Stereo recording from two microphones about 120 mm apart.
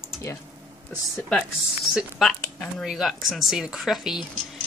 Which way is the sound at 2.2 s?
5° left (ahead or behind).